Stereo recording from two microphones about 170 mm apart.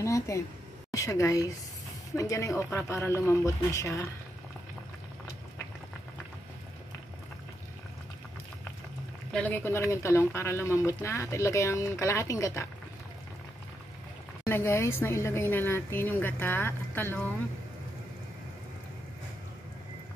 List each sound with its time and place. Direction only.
0.0 s speech: 15° left (ahead or behind)
9.3 s speech: 10° left (ahead or behind)
14.4 s speech: 15° left (ahead or behind)